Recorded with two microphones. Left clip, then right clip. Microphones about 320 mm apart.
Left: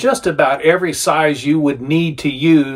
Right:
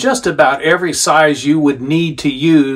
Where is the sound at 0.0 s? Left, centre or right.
Centre.